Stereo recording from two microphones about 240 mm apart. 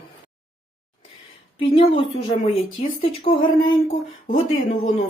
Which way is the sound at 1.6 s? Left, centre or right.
Left.